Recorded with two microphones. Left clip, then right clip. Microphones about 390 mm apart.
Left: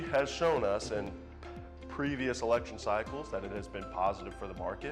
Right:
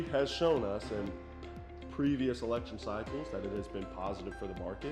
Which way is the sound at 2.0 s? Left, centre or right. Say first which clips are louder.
Even; left.